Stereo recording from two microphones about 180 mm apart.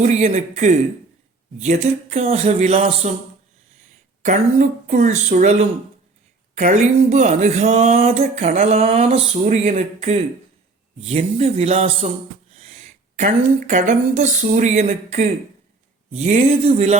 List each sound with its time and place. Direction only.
0.0 s speech: 40° right (ahead or behind)
1.8 s speech: 35° right (ahead or behind)
4.2 s speech: 45° right (ahead or behind)
13.1 s speech: 45° right (ahead or behind)